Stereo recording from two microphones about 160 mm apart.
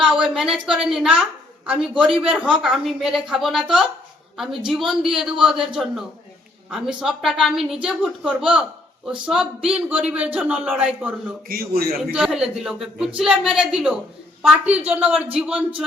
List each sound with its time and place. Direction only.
0.0 s a woman's voice: 5° right (ahead or behind)
11.4 s a man's voice: 70° right (ahead or behind)
12.1 s a woman's voice: 5° right (ahead or behind)